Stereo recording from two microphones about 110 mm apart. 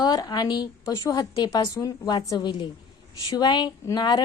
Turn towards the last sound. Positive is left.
turn(degrees=40)  # may be behind; listen again after turning